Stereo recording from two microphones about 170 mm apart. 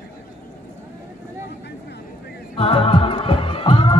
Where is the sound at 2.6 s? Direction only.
35° left (ahead or behind).